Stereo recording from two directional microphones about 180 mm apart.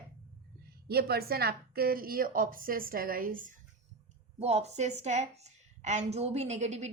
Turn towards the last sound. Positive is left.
turn(degrees=-40)  # may be behind; listen again after turning